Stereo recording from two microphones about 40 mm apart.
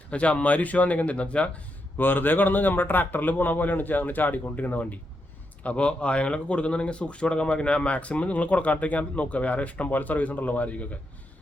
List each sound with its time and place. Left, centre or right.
0.1 s a man's voice: left
2.0 s speech: left
5.6 s a man's voice: left